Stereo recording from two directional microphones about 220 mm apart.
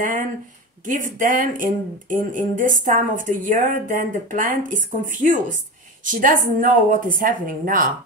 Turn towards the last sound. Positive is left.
turn(degrees=-40)  # may be behind; listen again after turning